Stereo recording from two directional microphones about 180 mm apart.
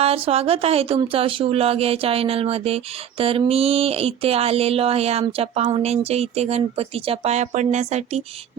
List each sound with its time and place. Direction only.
0.0 s speech: 35° right (ahead or behind)